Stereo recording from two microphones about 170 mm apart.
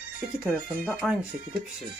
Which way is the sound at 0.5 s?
5° right (ahead or behind).